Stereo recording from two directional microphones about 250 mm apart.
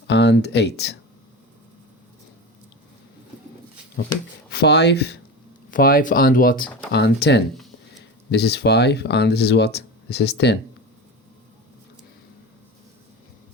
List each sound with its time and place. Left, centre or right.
0.1 s speech: left
4.0 s speech: left